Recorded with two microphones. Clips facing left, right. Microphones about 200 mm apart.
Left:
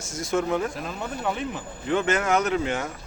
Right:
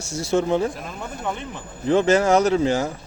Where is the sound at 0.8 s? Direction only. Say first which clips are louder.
Left 1 dB; centre (ahead or behind).